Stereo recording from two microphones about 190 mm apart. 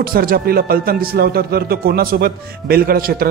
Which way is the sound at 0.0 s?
50° right (ahead or behind).